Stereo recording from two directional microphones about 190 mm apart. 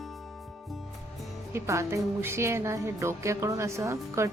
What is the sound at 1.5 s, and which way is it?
Speech, 15° right (ahead or behind).